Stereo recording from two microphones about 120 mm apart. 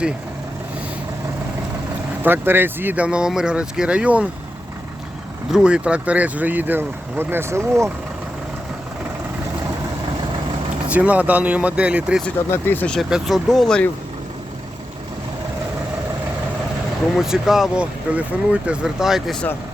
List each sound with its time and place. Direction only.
2.2 s speech: 20° right (ahead or behind)
5.5 s speech: 5° right (ahead or behind); by 7.9 s 25° right (ahead or behind)
10.8 s speech: 10° right (ahead or behind)
12.5 s speech: 15° left (ahead or behind)
12.9 s speech: centre (ahead or behind)
17.2 s speech: 5° right (ahead or behind)